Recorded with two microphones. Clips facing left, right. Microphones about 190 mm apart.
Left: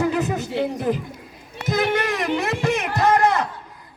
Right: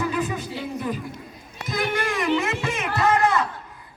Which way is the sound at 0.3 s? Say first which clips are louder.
Left 7 dB; 70° left (ahead or behind).